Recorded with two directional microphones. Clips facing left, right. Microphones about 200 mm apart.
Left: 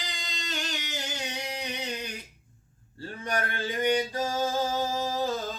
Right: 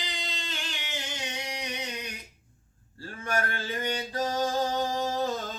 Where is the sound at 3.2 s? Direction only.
20° left (ahead or behind); by 5.4 s centre (ahead or behind).